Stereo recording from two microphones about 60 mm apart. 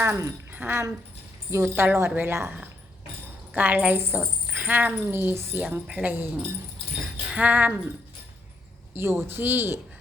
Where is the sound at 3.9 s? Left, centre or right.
Right.